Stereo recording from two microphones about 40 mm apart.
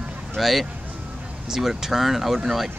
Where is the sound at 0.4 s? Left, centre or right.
Centre.